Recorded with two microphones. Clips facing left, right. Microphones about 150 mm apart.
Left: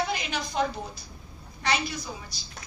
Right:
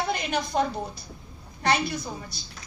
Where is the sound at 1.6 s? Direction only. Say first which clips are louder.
Right 4 dB; 50° right (ahead or behind).